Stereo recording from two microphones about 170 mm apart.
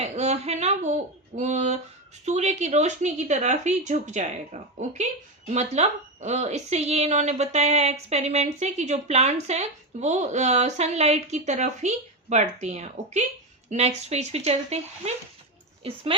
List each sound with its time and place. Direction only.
0.0 s a woman's voice: 40° right (ahead or behind)